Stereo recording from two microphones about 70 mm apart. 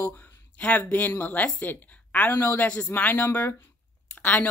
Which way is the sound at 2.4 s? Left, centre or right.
Left.